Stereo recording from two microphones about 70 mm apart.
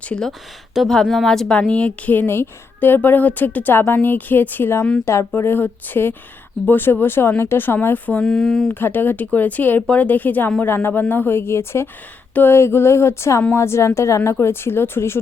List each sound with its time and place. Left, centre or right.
0.3 s speech: centre
1.5 s a woman's voice: centre
8.2 s speech: centre
8.7 s a woman's voice: left